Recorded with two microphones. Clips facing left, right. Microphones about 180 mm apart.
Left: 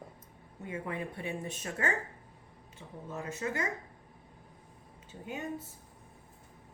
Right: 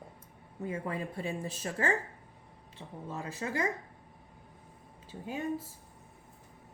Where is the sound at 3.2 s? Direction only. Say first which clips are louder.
Right 1 dB; 30° right (ahead or behind).